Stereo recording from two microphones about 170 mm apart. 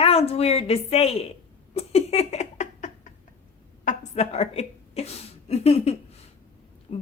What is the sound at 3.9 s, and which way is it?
A woman's voice, 40° left (ahead or behind).